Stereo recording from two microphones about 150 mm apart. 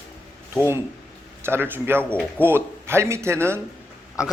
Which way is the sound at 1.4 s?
15° right (ahead or behind).